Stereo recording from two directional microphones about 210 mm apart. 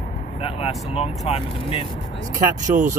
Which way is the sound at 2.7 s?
30° right (ahead or behind).